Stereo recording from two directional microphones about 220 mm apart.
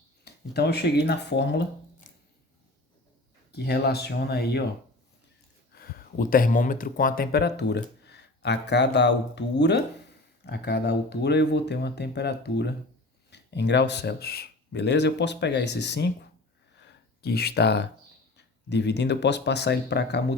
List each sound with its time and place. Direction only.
0.3 s speech: 45° left (ahead or behind)
3.5 s speech: 50° left (ahead or behind)
5.7 s speech: 40° left (ahead or behind)
16.8 s a sound: 45° left (ahead or behind)
18.3 s speech: 50° left (ahead or behind)